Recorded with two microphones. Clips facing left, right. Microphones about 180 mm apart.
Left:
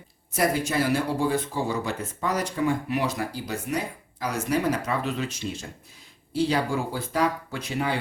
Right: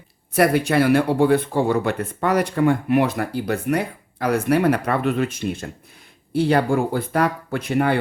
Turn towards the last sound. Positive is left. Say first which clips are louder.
# right 8 dB
turn(degrees=-55)  # may be behind; listen again after turning